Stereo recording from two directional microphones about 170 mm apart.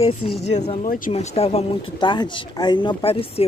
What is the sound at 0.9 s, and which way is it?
Speech, 55° left (ahead or behind).